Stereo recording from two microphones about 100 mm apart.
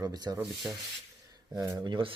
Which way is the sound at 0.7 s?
10° right (ahead or behind).